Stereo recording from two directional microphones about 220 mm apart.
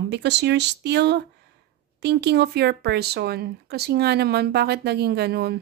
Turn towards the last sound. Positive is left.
turn(degrees=-45)  # may be behind; listen again after turning